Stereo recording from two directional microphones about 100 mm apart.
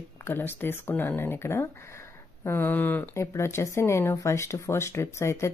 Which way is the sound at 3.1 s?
25° left (ahead or behind).